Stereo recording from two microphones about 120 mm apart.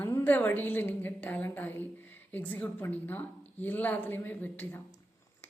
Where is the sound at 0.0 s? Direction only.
20° left (ahead or behind).